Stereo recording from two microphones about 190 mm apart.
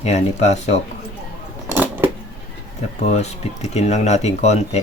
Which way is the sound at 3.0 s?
35° left (ahead or behind).